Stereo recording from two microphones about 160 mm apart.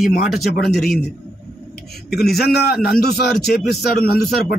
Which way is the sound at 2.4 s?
80° left.